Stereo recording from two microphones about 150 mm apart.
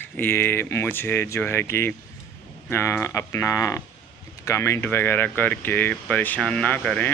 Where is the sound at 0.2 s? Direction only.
15° left (ahead or behind).